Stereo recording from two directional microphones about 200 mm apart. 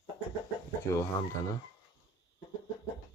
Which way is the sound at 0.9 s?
15° left (ahead or behind).